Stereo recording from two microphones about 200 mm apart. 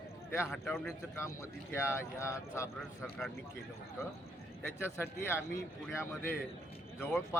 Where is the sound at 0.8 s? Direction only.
10° left (ahead or behind).